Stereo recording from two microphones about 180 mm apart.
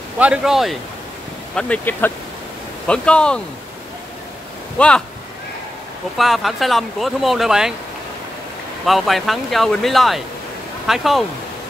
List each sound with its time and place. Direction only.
0.2 s speech: 5° right (ahead or behind)
4.7 s speech: 5° left (ahead or behind)
6.1 s speech: centre (ahead or behind)
8.8 s speech: centre (ahead or behind)